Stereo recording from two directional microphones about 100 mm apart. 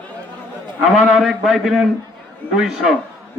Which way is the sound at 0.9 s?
Centre (ahead or behind).